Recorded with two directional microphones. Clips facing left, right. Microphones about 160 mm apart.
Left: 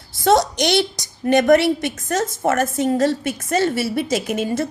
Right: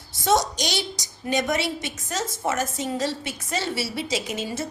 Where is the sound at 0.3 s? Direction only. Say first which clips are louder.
Left 6 dB; 60° left (ahead or behind).